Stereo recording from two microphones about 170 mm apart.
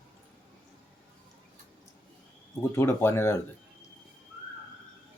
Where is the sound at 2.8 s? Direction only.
15° left (ahead or behind).